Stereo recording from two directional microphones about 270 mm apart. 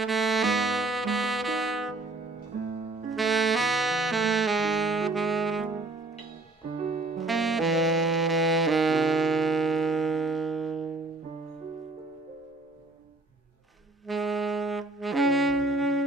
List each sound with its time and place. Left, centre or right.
0.0 s music: centre
3.1 s saxophone: centre
6.8 s music: right
7.2 s saxophone: centre
14.0 s saxophone: centre